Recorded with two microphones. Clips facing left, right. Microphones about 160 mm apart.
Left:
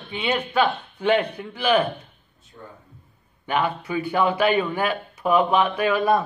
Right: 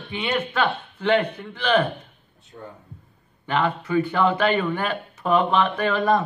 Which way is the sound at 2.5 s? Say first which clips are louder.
Right 3 dB; 50° right (ahead or behind).